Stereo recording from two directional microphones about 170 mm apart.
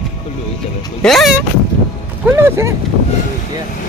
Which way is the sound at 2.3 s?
15° right (ahead or behind).